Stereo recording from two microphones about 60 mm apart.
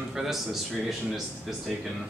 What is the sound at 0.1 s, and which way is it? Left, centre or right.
Speech, centre.